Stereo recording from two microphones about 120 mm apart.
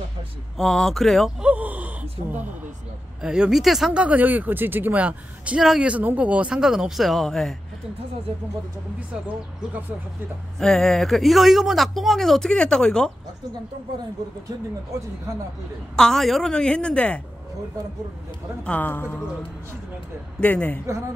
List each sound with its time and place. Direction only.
0.6 s speech: centre (ahead or behind)
1.4 s gasp: 10° right (ahead or behind)
3.2 s speech: 5° right (ahead or behind)
10.6 s speech: 5° left (ahead or behind)
16.0 s a woman's voice: 5° left (ahead or behind)
18.7 s a woman's voice: 15° left (ahead or behind)
20.3 s a woman's voice: 10° left (ahead or behind)